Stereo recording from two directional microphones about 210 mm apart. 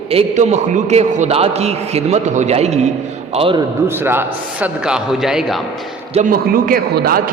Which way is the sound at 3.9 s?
10° right (ahead or behind).